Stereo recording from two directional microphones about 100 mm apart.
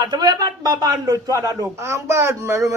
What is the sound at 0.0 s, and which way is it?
Speech, 45° right (ahead or behind).